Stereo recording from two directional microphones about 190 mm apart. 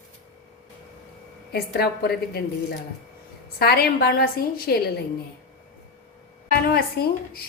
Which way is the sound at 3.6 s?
55° left (ahead or behind).